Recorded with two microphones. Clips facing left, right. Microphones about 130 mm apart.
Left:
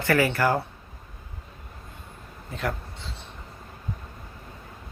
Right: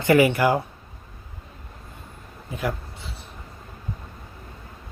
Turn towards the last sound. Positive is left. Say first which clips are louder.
# right 2 dB
turn(degrees=-10)  # may be behind; listen again after turning